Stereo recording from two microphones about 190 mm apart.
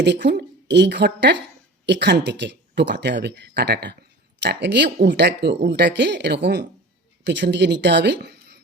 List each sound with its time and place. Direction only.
0.0 s speech: 65° right (ahead or behind)